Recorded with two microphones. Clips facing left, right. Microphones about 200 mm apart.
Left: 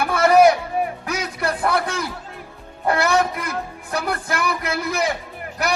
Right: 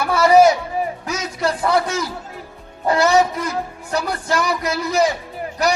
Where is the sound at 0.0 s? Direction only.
55° left (ahead or behind).